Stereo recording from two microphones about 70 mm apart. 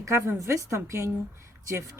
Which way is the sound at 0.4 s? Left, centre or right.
Right.